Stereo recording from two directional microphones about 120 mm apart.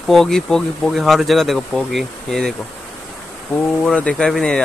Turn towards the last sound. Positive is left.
turn(degrees=5)  # may be behind; listen again after turning